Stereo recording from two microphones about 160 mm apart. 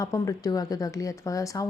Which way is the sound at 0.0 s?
20° left (ahead or behind).